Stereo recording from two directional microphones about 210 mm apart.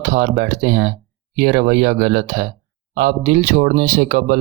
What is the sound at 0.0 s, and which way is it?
Speech, 40° right (ahead or behind).